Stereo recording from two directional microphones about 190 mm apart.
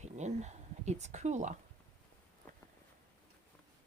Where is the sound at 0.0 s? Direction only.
40° right (ahead or behind).